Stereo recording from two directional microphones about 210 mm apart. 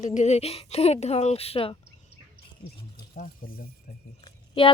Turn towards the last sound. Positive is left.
turn(degrees=25)  # may be behind; listen again after turning